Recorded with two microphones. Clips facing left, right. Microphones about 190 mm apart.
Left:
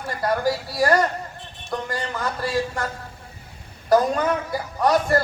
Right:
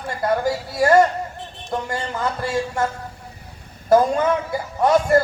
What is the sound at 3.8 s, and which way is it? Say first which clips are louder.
Speech: right 3 dB; 25° right (ahead or behind).